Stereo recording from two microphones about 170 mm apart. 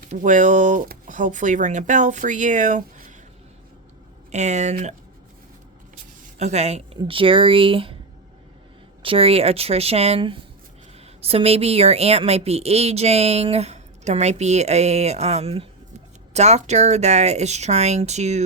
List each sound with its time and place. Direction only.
0.0 s speech: 45° right (ahead or behind)
4.3 s speech: 45° right (ahead or behind)
6.4 s a woman's voice: 40° right (ahead or behind)
9.0 s a woman's voice: 35° right (ahead or behind)